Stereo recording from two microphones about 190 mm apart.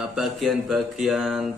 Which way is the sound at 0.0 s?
Centre (ahead or behind).